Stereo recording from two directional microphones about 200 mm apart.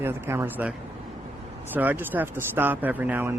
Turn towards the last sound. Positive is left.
turn(degrees=-10)  # may be behind; listen again after turning